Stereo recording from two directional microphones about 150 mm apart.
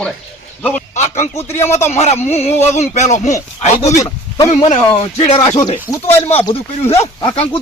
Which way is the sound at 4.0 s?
20° left (ahead or behind).